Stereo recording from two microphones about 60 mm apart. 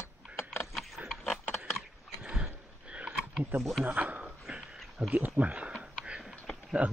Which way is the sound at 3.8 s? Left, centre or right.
Right.